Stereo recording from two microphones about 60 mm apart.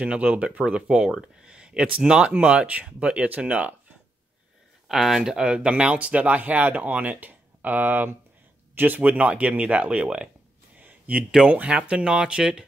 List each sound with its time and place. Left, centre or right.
0.0 s speech: centre
4.8 s speech: centre
10.8 s a sound: right
11.3 s speech: centre